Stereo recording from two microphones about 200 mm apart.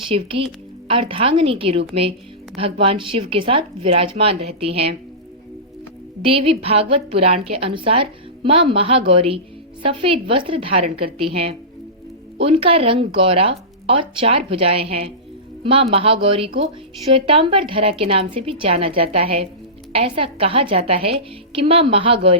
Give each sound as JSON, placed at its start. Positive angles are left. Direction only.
{"t": 0.1, "sound": "speech", "side_deg": -25}
{"t": 6.2, "sound": "speech", "side_deg": -30}